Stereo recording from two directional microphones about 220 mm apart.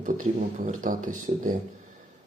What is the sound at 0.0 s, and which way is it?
Speech, 35° right (ahead or behind).